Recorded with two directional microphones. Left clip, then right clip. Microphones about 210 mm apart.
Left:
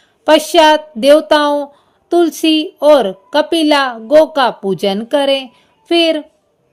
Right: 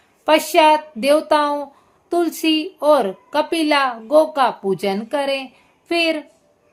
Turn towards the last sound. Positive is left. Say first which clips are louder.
# left 7 dB
turn(degrees=30)  # may be behind; listen again after turning